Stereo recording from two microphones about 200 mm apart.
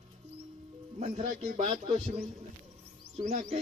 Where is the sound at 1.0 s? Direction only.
40° right (ahead or behind).